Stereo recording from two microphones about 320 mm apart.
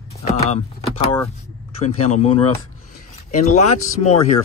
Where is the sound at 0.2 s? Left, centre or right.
Centre.